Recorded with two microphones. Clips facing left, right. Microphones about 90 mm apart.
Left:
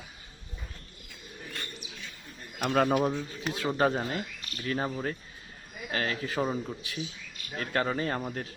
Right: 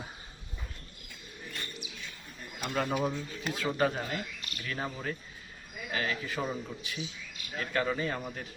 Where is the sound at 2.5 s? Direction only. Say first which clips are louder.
Left 7 dB; 60° left (ahead or behind).